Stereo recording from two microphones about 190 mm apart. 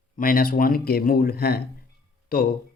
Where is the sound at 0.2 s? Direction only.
50° left (ahead or behind).